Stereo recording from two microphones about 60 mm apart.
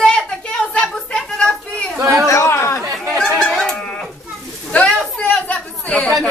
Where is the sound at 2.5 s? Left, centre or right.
Left.